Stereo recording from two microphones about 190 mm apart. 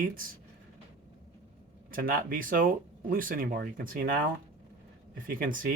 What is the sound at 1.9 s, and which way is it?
Speech, 50° right (ahead or behind).